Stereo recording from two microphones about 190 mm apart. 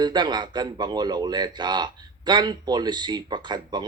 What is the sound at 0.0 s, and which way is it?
A man's voice, 20° right (ahead or behind).